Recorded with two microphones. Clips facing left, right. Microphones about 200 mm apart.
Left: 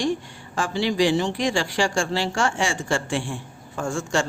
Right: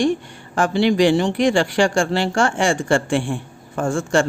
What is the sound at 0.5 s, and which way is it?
Speech, 60° right (ahead or behind).